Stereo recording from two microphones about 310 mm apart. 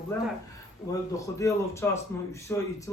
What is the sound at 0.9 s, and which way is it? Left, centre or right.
A man's voice, centre.